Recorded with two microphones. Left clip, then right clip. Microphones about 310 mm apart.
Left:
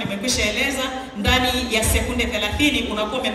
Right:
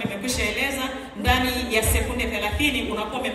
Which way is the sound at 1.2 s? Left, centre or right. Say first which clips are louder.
Left 3 dB; left.